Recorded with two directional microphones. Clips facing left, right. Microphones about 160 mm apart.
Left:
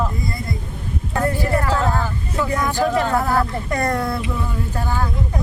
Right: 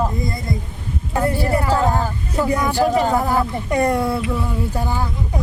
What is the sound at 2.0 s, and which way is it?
Speech, 35° right (ahead or behind).